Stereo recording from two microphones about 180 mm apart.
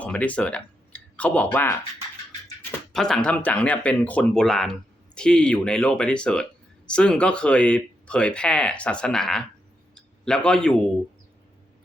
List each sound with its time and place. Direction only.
0.0 s speech: 10° left (ahead or behind)
2.9 s speech: 5° left (ahead or behind)
9.9 s a sound: 5° left (ahead or behind)